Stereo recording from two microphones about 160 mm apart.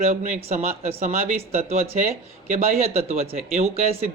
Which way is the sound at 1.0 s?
60° right (ahead or behind).